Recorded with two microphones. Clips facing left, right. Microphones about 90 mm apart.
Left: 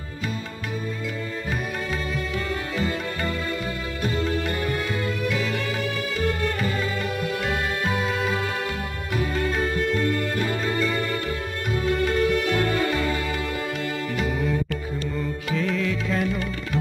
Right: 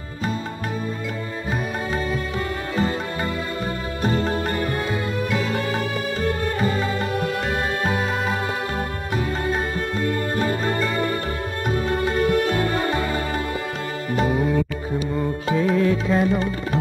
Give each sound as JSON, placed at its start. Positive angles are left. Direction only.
{"t": 2.7, "sound": "music", "side_deg": -35}
{"t": 7.8, "sound": "music", "side_deg": -35}
{"t": 10.3, "sound": "music", "side_deg": -35}
{"t": 12.2, "sound": "music", "side_deg": -35}